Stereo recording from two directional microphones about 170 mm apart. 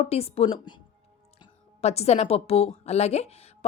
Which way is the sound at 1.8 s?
40° left (ahead or behind).